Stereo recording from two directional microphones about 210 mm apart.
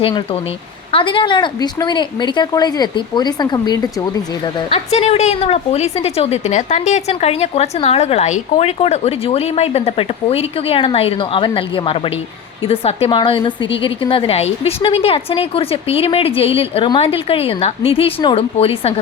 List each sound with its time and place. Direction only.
0.9 s a woman's voice: 25° left (ahead or behind)
4.7 s a woman's voice: 30° left (ahead or behind)